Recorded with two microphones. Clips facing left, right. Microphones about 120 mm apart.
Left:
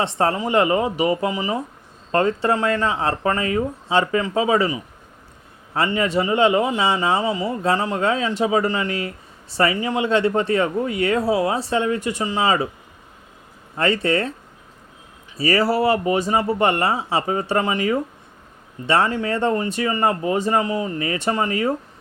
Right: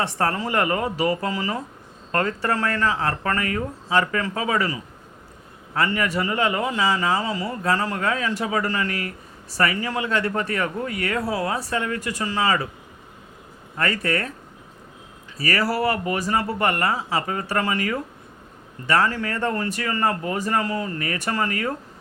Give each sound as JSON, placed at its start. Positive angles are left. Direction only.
{"t": 0.0, "sound": "a man's voice", "side_deg": 20}
{"t": 13.7, "sound": "a man's voice", "side_deg": 25}
{"t": 15.4, "sound": "a man's voice", "side_deg": 25}